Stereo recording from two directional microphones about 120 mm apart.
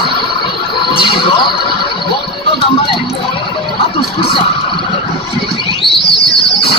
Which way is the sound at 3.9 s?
50° left (ahead or behind).